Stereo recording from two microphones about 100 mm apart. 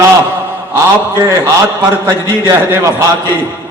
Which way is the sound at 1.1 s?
35° right (ahead or behind).